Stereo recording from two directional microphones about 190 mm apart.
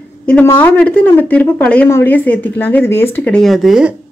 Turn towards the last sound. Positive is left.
turn(degrees=-5)  # may be behind; listen again after turning